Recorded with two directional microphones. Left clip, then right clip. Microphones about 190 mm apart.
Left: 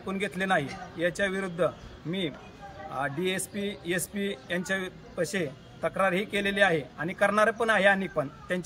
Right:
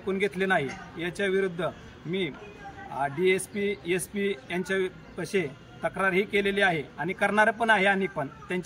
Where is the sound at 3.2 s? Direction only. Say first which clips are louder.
Right 6 dB; 15° left (ahead or behind).